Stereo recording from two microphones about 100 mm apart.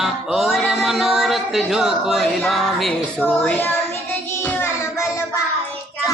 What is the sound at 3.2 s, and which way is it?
Child singing, 20° left (ahead or behind).